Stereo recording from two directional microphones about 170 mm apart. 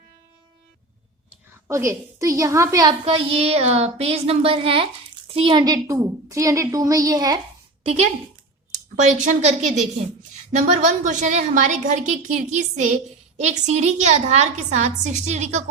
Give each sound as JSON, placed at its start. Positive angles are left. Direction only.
{"t": 1.3, "sound": "a woman's voice", "side_deg": -15}
{"t": 3.0, "sound": "a woman's voice", "side_deg": -35}
{"t": 9.0, "sound": "a woman's voice", "side_deg": -45}